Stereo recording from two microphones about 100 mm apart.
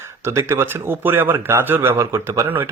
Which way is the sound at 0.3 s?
25° right (ahead or behind).